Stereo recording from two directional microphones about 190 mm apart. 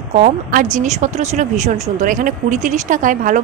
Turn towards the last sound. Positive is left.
turn(degrees=-45)  # may be behind; listen again after turning